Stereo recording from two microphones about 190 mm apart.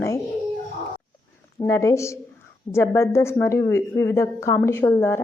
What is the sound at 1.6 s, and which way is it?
Speech, 15° left (ahead or behind).